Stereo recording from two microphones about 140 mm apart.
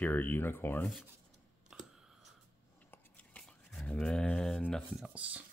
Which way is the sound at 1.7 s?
5° right (ahead or behind).